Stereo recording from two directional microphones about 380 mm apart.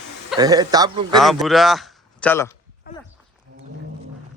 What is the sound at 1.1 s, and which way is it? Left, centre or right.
A man's voice, centre.